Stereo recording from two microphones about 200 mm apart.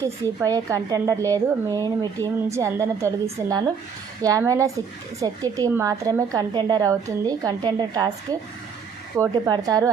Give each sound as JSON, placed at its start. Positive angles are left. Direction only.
{"t": 0.0, "sound": "a woman's voice", "side_deg": -15}